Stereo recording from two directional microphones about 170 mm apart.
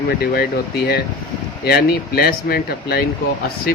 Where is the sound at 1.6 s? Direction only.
65° left (ahead or behind).